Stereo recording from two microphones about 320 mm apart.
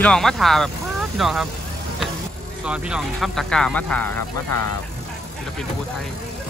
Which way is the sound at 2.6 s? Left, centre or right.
Centre.